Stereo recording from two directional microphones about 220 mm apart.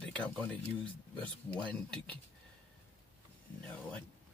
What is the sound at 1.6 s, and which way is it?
Speech, 5° left (ahead or behind).